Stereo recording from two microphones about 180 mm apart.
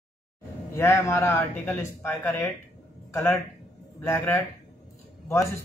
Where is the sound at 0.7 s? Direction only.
15° left (ahead or behind).